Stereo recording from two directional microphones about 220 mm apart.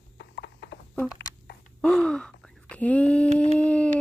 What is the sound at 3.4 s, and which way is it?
Howl, 5° left (ahead or behind).